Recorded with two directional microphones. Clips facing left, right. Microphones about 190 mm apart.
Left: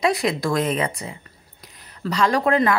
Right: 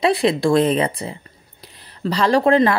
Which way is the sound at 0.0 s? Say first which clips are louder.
Right 4 dB; 30° right (ahead or behind).